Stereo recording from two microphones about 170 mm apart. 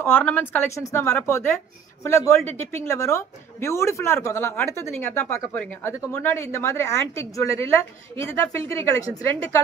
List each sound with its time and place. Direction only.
0.0 s speech: 10° left (ahead or behind)